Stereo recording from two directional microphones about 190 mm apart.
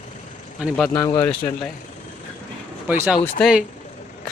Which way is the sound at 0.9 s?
20° left (ahead or behind).